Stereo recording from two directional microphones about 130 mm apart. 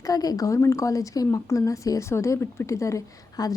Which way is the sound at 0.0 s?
30° left (ahead or behind).